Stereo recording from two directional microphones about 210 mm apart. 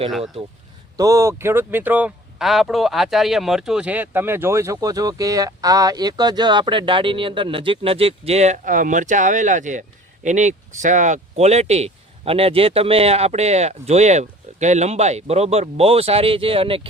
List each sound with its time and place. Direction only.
0.9 s speech: 15° right (ahead or behind)